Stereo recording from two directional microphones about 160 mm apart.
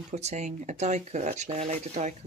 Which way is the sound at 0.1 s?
45° right (ahead or behind).